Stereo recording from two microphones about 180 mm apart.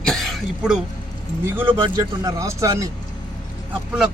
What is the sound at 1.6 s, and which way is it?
Speech, 25° right (ahead or behind).